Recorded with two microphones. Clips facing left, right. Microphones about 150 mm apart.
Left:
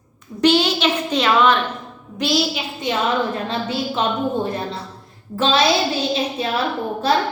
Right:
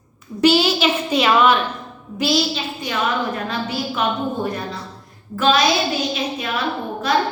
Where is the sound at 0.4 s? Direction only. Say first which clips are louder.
Right 1 dB; 5° right (ahead or behind).